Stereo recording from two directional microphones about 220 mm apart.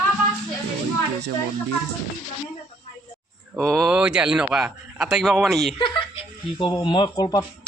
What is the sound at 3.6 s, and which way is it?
A man's voice, centre (ahead or behind).